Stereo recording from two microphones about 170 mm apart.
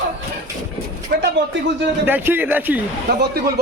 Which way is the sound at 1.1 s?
60° right (ahead or behind).